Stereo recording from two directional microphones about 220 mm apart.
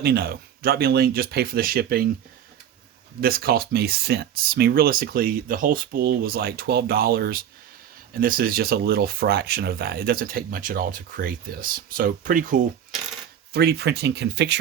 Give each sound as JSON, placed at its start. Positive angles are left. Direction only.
{"t": 0.0, "sound": "speech", "side_deg": -45}
{"t": 3.2, "sound": "speech", "side_deg": -45}